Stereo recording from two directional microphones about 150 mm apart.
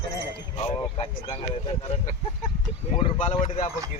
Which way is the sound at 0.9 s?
40° left (ahead or behind).